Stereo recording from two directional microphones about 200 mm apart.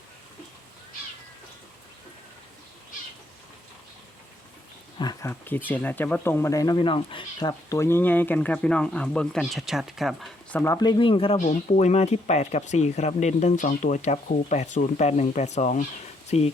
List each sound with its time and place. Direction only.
4.9 s speech: 15° left (ahead or behind); by 10.6 s centre (ahead or behind)
10.6 s speech: 15° left (ahead or behind)
11.3 s speech: 35° left (ahead or behind)